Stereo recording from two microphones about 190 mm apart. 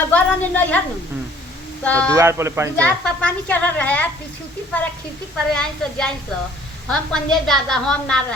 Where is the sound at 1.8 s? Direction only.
5° left (ahead or behind).